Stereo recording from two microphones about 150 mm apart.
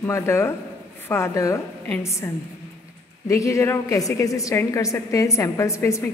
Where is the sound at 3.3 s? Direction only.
20° left (ahead or behind).